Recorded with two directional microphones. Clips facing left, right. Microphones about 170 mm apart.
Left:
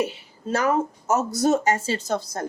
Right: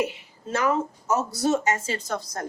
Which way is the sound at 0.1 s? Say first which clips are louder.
Left 3 dB; 35° left (ahead or behind).